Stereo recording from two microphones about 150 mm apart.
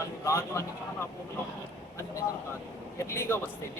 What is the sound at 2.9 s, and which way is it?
Speech, 15° left (ahead or behind).